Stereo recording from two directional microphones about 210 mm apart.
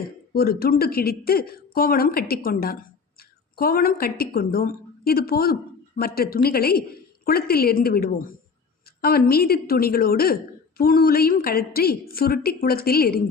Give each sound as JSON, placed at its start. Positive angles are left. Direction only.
{"t": 0.3, "sound": "a woman's voice", "side_deg": 45}